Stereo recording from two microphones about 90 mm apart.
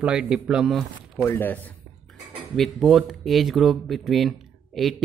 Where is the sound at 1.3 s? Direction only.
20° left (ahead or behind).